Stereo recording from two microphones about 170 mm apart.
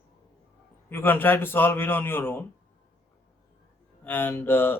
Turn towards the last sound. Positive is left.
turn(degrees=10)  # may be behind; listen again after turning